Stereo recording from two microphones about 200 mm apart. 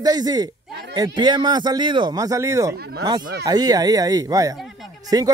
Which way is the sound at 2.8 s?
50° right (ahead or behind).